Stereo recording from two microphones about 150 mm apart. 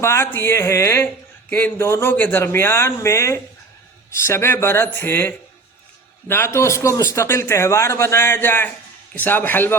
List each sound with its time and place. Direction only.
0.0 s speech: 15° left (ahead or behind)